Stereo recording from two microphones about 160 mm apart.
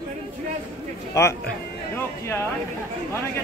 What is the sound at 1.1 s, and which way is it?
Speech, 20° left (ahead or behind).